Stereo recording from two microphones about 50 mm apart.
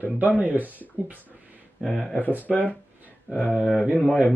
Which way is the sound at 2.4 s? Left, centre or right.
Left.